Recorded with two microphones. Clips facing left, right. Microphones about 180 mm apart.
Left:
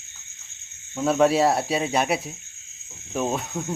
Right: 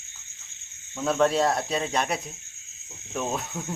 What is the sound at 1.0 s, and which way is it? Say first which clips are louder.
Cricket: left 3 dB; 10° left (ahead or behind).